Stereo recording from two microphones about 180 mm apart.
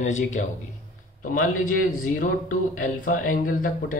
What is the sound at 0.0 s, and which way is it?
Speech, 40° left (ahead or behind).